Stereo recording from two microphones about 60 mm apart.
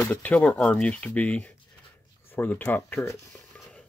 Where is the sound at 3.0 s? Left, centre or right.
Centre.